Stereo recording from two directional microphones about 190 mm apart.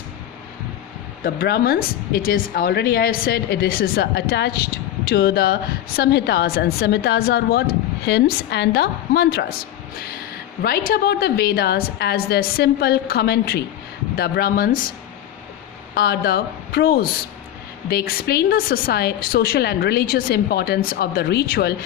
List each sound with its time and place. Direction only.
1.2 s a woman's voice: 55° left (ahead or behind)
10.6 s a woman's voice: 50° left (ahead or behind)
16.0 s a woman's voice: 55° left (ahead or behind)